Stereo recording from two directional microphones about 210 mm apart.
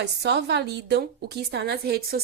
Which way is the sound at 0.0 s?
55° right (ahead or behind).